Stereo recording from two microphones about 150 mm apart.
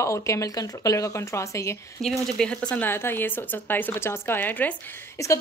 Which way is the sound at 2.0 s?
5° left (ahead or behind).